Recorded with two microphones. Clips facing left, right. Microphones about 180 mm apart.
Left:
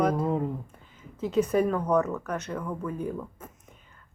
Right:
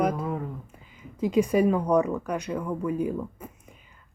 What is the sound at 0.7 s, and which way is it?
Speech, 10° right (ahead or behind).